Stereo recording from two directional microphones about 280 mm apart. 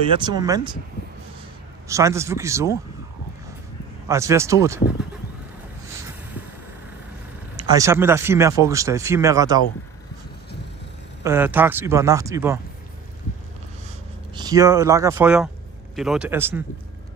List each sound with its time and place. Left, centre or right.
0.1 s speech: centre
1.9 s speech: centre
4.1 s speech: centre
7.5 s speech: centre
11.2 s speech: centre
14.3 s speech: centre